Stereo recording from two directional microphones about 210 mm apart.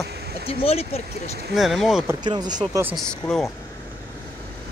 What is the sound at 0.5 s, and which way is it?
Speech, 30° left (ahead or behind).